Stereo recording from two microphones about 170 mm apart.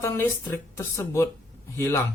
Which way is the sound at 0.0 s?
15° left (ahead or behind).